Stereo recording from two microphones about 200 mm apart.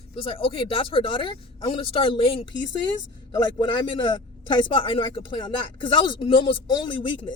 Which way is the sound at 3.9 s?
20° left (ahead or behind).